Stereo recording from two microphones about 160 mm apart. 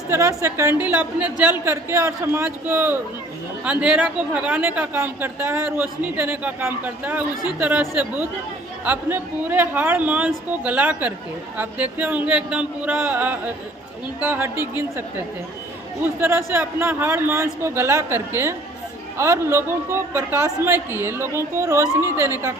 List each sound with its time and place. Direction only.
0.1 s a man's voice: 15° right (ahead or behind)
16.2 s a man's voice: 15° right (ahead or behind)